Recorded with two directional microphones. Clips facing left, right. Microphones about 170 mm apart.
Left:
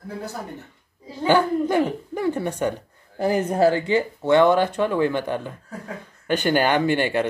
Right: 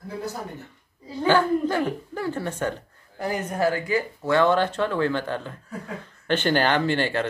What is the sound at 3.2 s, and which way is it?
Speech, 30° left (ahead or behind).